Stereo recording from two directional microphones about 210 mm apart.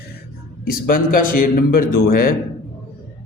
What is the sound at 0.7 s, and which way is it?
A man's voice, 45° left (ahead or behind).